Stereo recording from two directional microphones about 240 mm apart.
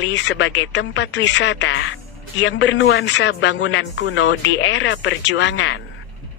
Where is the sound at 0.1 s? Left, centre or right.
Left.